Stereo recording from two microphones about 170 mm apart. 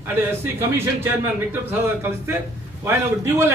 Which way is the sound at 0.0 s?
15° right (ahead or behind).